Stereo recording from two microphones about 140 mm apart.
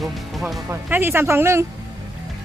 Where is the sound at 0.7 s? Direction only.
15° right (ahead or behind).